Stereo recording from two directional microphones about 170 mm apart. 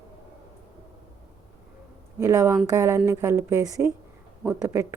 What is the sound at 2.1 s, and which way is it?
A woman's voice, 15° right (ahead or behind).